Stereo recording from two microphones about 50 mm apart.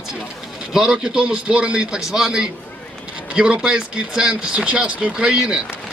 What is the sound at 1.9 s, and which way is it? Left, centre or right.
A man's voice, centre.